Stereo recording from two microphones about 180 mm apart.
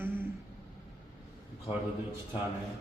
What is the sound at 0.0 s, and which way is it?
Vehicle, 10° right (ahead or behind).